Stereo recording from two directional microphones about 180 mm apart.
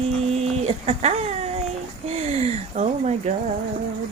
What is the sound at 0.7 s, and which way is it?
Speech, 35° right (ahead or behind).